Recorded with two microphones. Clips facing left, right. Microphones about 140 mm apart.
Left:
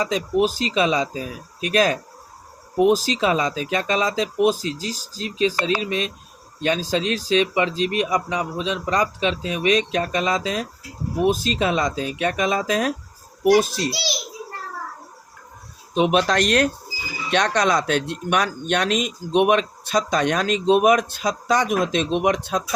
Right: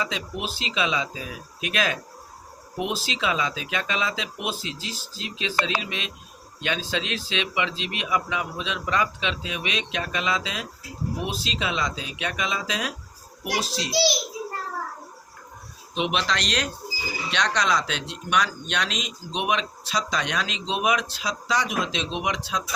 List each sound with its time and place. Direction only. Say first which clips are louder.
0.0 s speech: left 10 dB; 40° left (ahead or behind)
16.0 s speech: left 8 dB; 45° left (ahead or behind)